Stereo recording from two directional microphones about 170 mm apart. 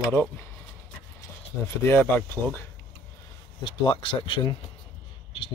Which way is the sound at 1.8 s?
10° left (ahead or behind).